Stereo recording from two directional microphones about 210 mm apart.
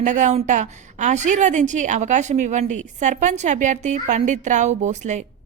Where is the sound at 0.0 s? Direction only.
35° right (ahead or behind).